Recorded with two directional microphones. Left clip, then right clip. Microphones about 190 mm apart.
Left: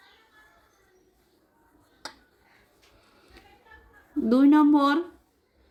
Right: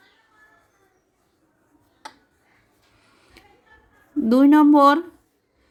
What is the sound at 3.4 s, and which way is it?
Music, 35° right (ahead or behind).